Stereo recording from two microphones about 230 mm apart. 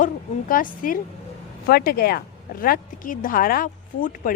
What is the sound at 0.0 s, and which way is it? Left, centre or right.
Speech, left.